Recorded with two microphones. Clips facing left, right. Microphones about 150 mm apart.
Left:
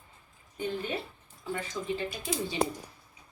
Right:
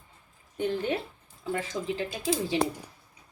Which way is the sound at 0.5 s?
75° right (ahead or behind).